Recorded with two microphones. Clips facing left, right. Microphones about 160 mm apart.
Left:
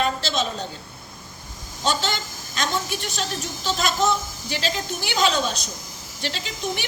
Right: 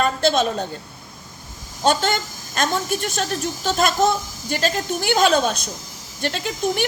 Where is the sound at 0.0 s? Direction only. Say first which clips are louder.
Right 5 dB; 50° right (ahead or behind).